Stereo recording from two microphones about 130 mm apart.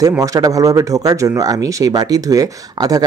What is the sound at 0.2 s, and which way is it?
Speech, 25° right (ahead or behind).